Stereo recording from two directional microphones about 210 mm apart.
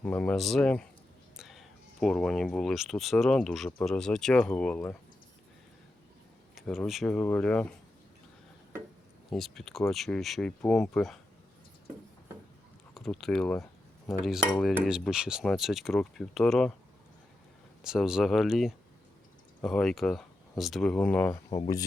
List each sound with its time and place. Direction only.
0.0 s speech: 5° left (ahead or behind)
6.6 s speech: centre (ahead or behind)
9.3 s speech: centre (ahead or behind)
12.9 s speech: centre (ahead or behind)
17.8 s speech: 5° right (ahead or behind)
21.5 s speech: 20° left (ahead or behind)